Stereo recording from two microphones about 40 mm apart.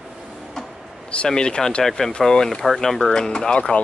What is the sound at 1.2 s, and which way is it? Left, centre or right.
Speech, centre.